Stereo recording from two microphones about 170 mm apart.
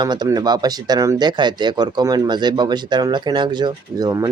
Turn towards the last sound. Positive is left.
turn(degrees=-20)  # may be behind; listen again after turning